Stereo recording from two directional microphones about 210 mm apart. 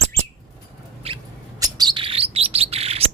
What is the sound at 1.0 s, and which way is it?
Rodents, 25° right (ahead or behind).